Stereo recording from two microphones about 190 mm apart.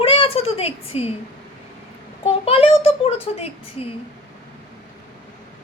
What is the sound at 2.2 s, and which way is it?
A child's voice, 30° left (ahead or behind).